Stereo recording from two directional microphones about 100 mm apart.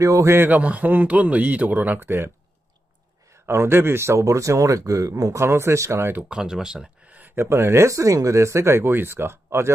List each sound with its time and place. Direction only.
0.0 s a man's voice: 30° right (ahead or behind)
3.4 s speech: 25° right (ahead or behind)
6.2 s speech: 5° right (ahead or behind); by 9.7 s 25° right (ahead or behind)